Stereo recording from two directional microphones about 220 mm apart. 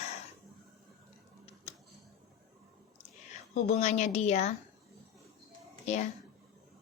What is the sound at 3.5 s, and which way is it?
A woman's voice, 30° left (ahead or behind).